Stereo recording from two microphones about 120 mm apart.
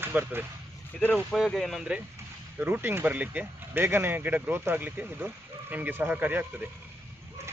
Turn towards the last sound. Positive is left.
turn(degrees=-15)  # may be behind; listen again after turning